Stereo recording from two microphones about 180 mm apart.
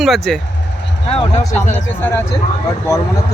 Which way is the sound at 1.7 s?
10° left (ahead or behind).